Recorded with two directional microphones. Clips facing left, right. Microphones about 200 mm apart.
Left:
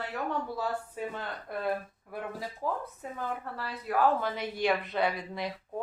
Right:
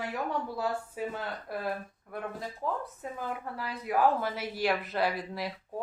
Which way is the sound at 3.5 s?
10° right (ahead or behind).